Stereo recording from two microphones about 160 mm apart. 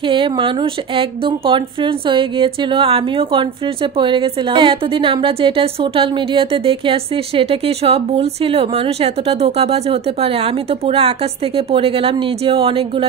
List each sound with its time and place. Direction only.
0.0 s a woman's voice: 30° right (ahead or behind)